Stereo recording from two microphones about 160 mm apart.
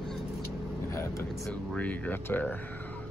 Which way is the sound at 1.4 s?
10° left (ahead or behind).